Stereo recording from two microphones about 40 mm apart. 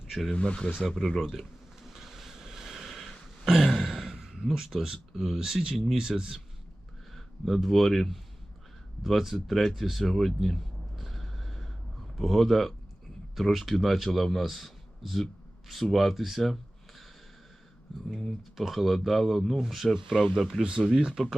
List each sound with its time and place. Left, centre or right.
0.3 s speech: left
0.8 s a sound: centre
5.9 s speech: centre
7.4 s a man's voice: centre
10.0 s a man's voice: centre
10.9 s gasp: centre
12.1 s a man's voice: centre
18.5 s a man's voice: centre
19.5 s speech: centre
20.6 s speech: right